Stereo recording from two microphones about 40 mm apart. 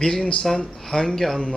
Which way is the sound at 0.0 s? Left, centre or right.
Centre.